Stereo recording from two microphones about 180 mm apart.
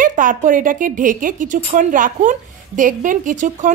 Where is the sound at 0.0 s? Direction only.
45° right (ahead or behind).